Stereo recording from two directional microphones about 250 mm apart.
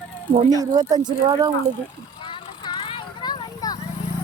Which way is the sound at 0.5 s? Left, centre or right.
Centre.